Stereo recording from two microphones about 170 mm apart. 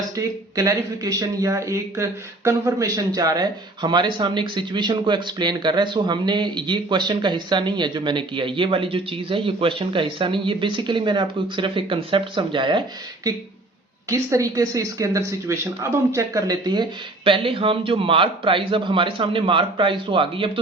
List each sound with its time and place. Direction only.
0.5 s speech: 20° right (ahead or behind)
14.1 s speech: 20° right (ahead or behind)